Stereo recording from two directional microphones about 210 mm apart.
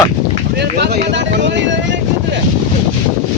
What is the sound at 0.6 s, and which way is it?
Vehicle, 50° right (ahead or behind).